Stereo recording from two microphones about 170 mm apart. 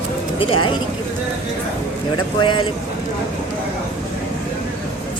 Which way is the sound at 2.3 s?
30° left (ahead or behind).